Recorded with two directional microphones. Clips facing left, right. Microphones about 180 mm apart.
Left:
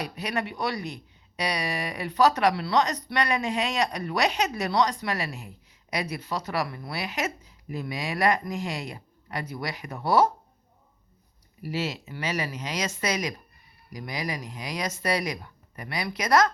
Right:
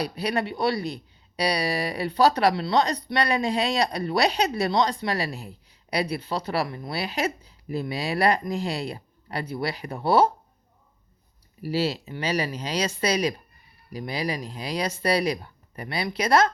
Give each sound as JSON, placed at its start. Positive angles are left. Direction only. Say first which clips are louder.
{"t": 0.0, "sound": "speech", "louder": "right 4 dB", "side_deg": -35}
{"t": 11.6, "sound": "speech", "louder": "right 5 dB", "side_deg": -30}